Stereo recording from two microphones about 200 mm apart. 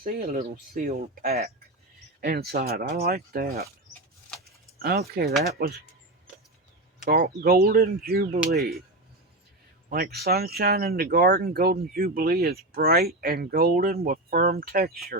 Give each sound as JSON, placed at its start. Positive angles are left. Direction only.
{"t": 0.0, "sound": "speech", "side_deg": -45}
{"t": 4.8, "sound": "speech", "side_deg": -50}
{"t": 7.1, "sound": "speech", "side_deg": -50}
{"t": 9.9, "sound": "speech", "side_deg": -50}